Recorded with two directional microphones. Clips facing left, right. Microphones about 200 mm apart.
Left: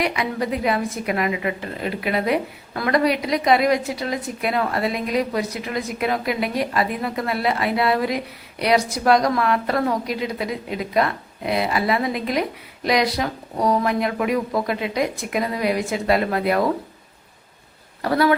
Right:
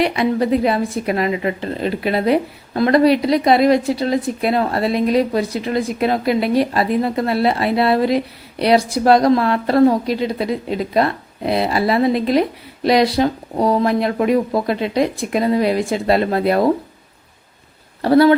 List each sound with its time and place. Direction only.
0.0 s a woman's voice: 30° right (ahead or behind)
18.0 s a woman's voice: 30° right (ahead or behind)